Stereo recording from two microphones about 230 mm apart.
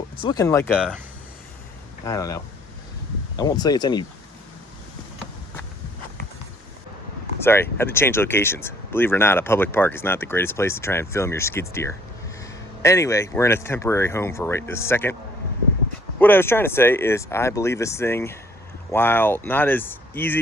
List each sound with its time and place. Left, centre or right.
0.2 s speech: centre
2.0 s speech: centre
7.4 s speech: centre
16.1 s speech: centre